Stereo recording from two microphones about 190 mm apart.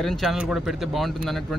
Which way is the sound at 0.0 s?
Centre (ahead or behind).